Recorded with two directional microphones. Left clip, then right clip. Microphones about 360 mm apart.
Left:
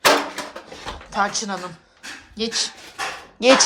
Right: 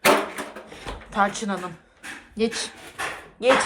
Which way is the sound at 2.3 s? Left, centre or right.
Centre.